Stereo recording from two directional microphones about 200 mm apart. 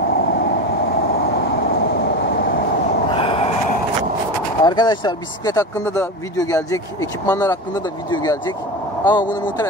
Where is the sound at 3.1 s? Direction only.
25° left (ahead or behind).